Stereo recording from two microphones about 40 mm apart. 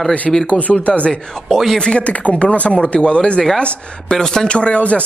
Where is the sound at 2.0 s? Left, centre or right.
Left.